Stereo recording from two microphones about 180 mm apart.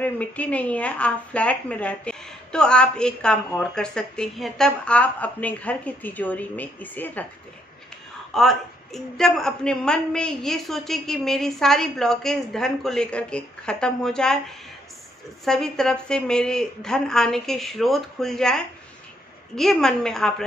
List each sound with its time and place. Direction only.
0.0 s a woman's voice: 10° left (ahead or behind)
8.4 s a woman's voice: centre (ahead or behind)
15.4 s a woman's voice: centre (ahead or behind)